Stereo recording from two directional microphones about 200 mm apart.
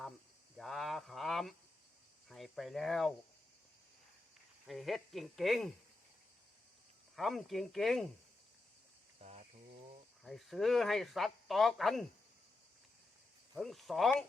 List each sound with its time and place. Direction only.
0.5 s a sound: centre (ahead or behind)
2.3 s speech: centre (ahead or behind)
4.6 s speech: centre (ahead or behind)
7.2 s speech: centre (ahead or behind)
9.2 s a sound: 35° right (ahead or behind)
10.2 s speech: centre (ahead or behind)
13.5 s speech: centre (ahead or behind)